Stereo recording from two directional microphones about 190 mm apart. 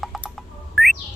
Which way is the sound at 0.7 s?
Centre (ahead or behind).